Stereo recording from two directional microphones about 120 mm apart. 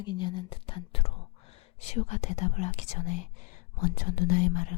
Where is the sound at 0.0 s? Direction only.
40° left (ahead or behind); by 3.2 s 90° left.